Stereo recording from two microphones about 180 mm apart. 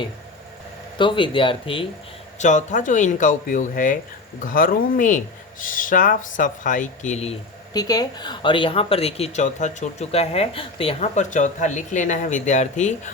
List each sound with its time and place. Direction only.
0.9 s speech: 25° left (ahead or behind)
2.4 s speech: 40° left (ahead or behind)
7.7 s a woman's voice: 20° left (ahead or behind); by 12.9 s 40° left (ahead or behind)